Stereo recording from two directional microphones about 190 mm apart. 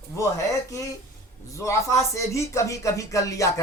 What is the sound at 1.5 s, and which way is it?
Speech, 15° left (ahead or behind).